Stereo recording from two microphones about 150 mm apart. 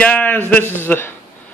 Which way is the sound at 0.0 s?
10° left (ahead or behind).